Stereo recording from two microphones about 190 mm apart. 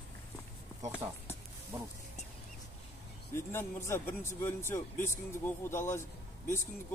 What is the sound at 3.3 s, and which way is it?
A man's voice, 15° left (ahead or behind).